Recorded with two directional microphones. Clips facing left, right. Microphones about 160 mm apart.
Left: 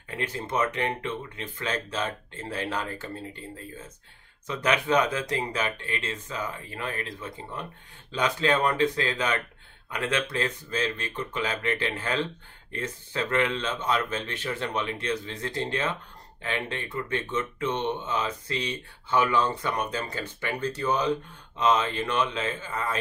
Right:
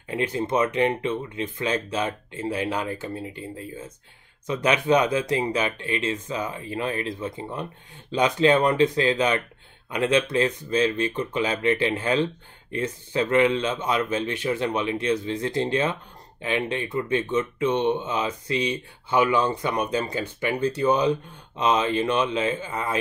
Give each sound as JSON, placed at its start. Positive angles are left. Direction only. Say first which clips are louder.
{"t": 0.1, "sound": "speech", "louder": "right 6 dB", "side_deg": -20}